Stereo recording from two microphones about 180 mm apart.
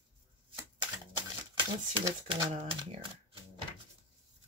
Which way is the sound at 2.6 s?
30° right (ahead or behind).